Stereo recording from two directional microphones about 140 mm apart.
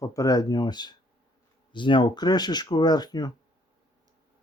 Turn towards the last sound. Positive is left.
turn(degrees=30)  # may be behind; listen again after turning